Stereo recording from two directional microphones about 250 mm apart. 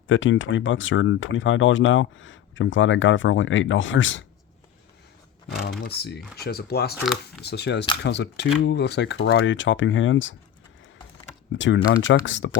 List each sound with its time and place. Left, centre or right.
0.1 s speech: left
5.8 s speech: left
7.0 s speech: centre
7.4 s speech: left
11.5 s speech: left